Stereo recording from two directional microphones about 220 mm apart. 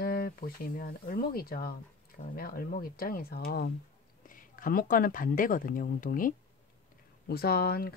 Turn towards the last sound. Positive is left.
turn(degrees=45)  # may be behind; listen again after turning